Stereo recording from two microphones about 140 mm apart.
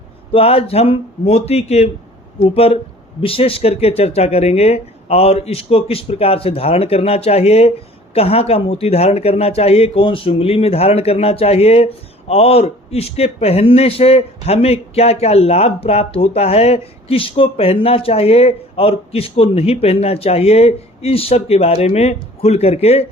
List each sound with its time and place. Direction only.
0.3 s speech: 45° left (ahead or behind)
3.2 s speech: 40° left (ahead or behind)